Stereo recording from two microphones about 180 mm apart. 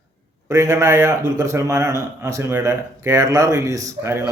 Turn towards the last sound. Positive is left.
turn(degrees=-15)  # may be behind; listen again after turning